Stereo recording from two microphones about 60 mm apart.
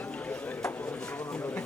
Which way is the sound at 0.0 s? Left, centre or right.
Left.